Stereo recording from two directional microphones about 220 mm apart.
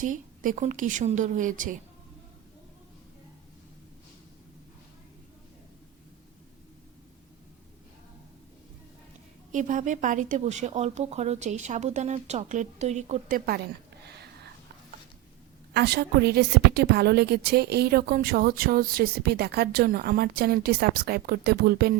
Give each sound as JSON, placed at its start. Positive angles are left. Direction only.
{"t": 0.0, "sound": "speech", "side_deg": -35}
{"t": 9.5, "sound": "speech", "side_deg": -35}
{"t": 15.7, "sound": "a woman's voice", "side_deg": -50}